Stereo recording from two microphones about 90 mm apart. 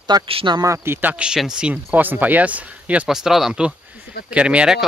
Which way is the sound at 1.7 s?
20° right (ahead or behind).